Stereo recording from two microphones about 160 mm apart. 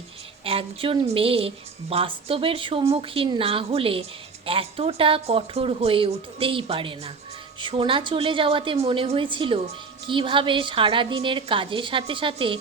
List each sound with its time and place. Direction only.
0.4 s a woman's voice: 35° right (ahead or behind)